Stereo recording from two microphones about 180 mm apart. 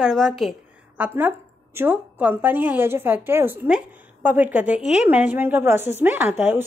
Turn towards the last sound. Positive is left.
turn(degrees=-10)  # may be behind; listen again after turning